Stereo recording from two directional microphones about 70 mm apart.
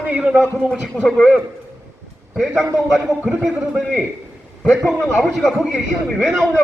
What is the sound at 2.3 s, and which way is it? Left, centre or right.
A man's voice, centre.